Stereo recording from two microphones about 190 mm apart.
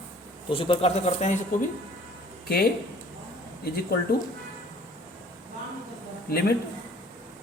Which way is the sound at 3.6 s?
55° left (ahead or behind).